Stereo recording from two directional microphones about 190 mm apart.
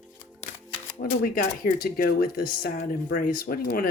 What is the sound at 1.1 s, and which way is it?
Speech, 50° left (ahead or behind).